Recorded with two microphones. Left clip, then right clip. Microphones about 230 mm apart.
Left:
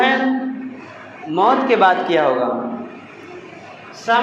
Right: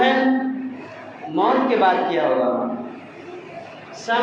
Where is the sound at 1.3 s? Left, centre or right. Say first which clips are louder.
Left 4 dB; left.